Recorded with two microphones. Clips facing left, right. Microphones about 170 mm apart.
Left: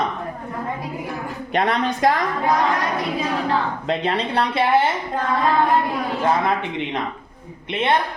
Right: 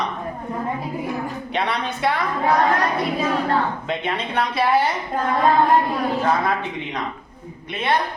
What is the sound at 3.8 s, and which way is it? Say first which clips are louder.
Speech: left 3 dB; 35° left (ahead or behind).